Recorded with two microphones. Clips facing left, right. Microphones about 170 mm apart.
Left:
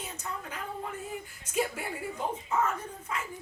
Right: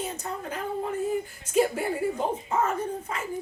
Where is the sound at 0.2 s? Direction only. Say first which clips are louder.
Right 6 dB; 35° right (ahead or behind).